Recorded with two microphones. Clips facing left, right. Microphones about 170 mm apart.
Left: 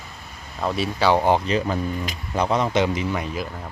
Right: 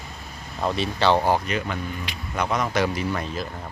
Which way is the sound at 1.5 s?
35° left (ahead or behind).